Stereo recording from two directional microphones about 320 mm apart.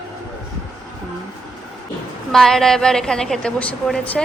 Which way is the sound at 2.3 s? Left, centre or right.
Centre.